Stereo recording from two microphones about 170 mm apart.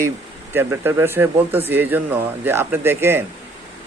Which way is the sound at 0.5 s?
15° right (ahead or behind).